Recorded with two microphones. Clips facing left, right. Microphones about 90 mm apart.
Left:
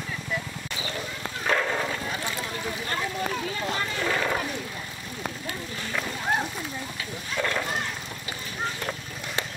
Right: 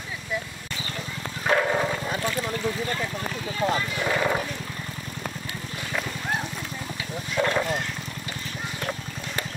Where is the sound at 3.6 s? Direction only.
25° right (ahead or behind).